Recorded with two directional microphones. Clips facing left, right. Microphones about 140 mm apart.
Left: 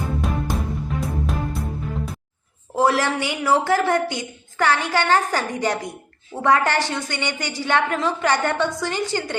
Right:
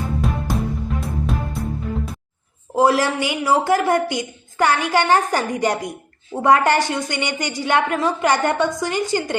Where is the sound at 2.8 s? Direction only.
10° right (ahead or behind).